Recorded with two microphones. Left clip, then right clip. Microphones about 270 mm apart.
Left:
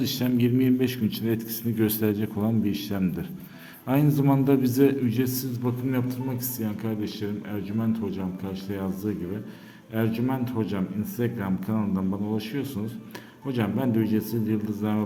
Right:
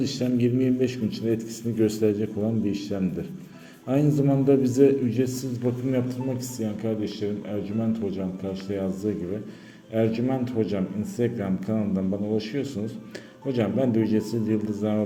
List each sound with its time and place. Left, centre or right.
0.0 s a man's voice: centre
6.6 s a man's voice: centre